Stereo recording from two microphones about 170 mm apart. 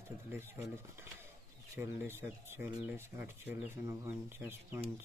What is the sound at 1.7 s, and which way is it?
Speech, 15° right (ahead or behind).